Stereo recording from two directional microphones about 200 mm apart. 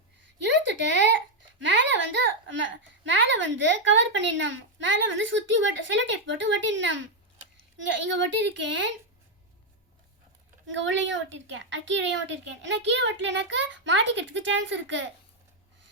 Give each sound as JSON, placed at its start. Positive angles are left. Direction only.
{"t": 0.4, "sound": "a sound", "side_deg": -65}
{"t": 1.6, "sound": "a child's voice", "side_deg": -65}
{"t": 8.1, "sound": "a woman's voice", "side_deg": -60}
{"t": 10.7, "sound": "a woman's voice", "side_deg": -65}